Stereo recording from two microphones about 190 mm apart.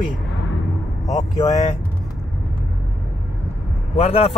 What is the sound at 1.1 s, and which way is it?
Speech, 20° left (ahead or behind).